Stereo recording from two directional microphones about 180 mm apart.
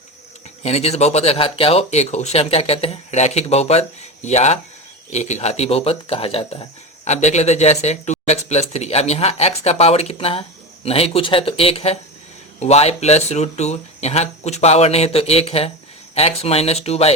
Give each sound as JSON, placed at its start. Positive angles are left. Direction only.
{"t": 0.6, "sound": "speech", "side_deg": 35}